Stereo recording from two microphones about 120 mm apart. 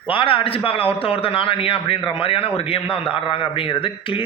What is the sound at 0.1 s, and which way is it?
A man's voice, 45° left (ahead or behind).